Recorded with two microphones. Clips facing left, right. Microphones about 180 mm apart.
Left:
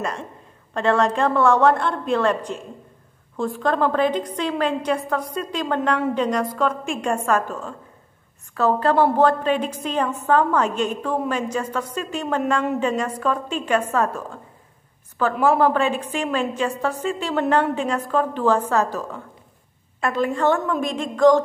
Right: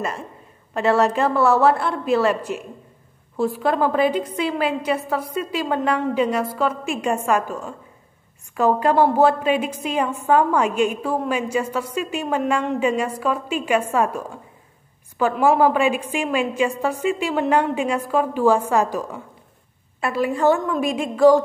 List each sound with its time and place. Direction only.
0.0 s a woman's voice: 5° right (ahead or behind)
15.4 s a woman's voice: 10° right (ahead or behind)